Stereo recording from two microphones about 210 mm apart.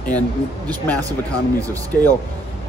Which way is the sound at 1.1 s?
15° right (ahead or behind).